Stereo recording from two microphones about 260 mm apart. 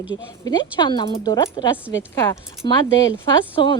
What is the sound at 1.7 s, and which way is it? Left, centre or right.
Speech, centre.